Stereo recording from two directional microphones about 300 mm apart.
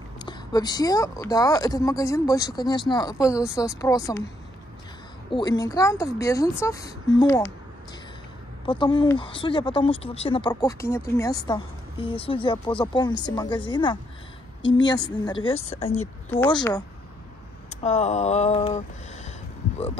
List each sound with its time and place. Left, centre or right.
0.2 s speech: centre
5.3 s speech: centre
8.6 s speech: centre
15.0 s speech: centre